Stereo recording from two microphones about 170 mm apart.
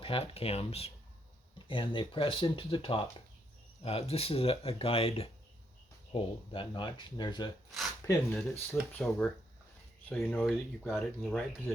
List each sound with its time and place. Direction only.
0.0 s speech: 35° left (ahead or behind); by 11.7 s 5° left (ahead or behind)